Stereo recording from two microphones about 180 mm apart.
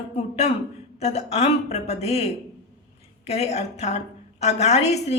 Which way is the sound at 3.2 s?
35° left (ahead or behind).